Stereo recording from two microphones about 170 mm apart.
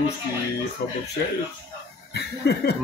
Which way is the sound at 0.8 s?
75° left (ahead or behind).